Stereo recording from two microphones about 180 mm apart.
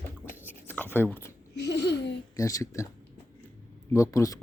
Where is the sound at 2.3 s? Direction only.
20° left (ahead or behind).